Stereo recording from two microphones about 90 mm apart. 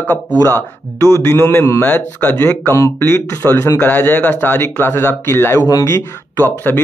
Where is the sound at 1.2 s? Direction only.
25° left (ahead or behind).